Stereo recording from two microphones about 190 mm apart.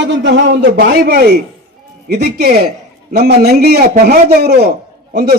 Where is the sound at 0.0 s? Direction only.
70° right (ahead or behind).